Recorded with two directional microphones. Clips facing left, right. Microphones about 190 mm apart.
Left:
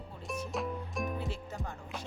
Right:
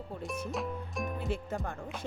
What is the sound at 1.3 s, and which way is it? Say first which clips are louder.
Music: right 6 dB; 55° right (ahead or behind).